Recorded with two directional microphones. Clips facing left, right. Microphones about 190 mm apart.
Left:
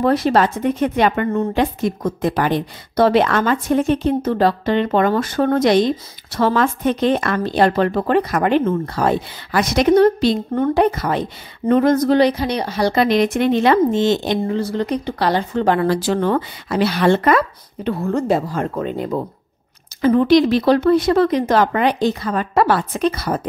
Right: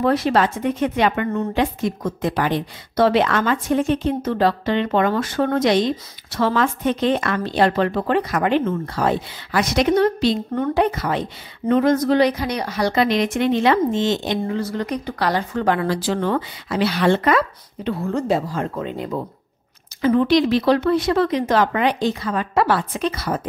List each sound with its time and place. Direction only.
0.0 s speech: 40° left (ahead or behind)
15.9 s speech: 50° left (ahead or behind)